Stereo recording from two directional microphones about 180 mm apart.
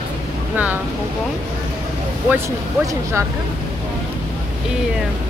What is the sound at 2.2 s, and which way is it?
Speech, 15° right (ahead or behind).